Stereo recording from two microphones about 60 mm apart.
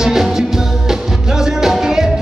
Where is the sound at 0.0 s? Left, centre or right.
Centre.